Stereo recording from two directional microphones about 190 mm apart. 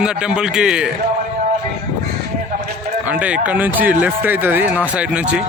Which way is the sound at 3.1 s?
5° right (ahead or behind).